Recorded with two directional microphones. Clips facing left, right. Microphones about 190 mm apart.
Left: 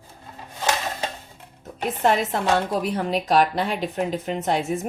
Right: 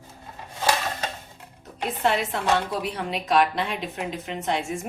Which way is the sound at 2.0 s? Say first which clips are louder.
Left 3 dB; 45° left (ahead or behind).